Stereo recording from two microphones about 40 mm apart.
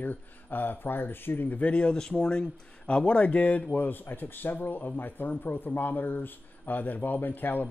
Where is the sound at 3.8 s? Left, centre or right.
Left.